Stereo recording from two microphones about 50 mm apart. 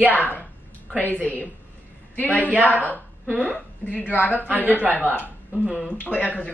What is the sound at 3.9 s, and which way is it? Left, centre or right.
A woman's voice, left.